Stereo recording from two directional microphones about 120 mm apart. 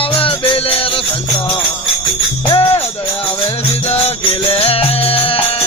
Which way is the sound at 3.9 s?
55° left (ahead or behind).